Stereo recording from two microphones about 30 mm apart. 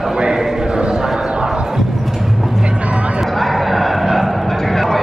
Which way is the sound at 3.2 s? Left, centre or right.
Centre.